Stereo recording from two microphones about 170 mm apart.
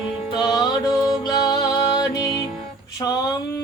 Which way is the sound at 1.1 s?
25° left (ahead or behind).